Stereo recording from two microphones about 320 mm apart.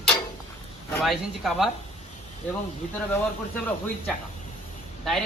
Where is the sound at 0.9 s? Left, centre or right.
Centre.